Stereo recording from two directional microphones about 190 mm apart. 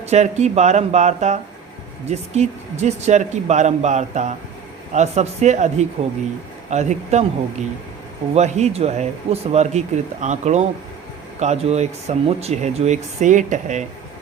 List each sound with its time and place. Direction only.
0.0 s speech: 35° right (ahead or behind)
8.4 s speech: 35° right (ahead or behind)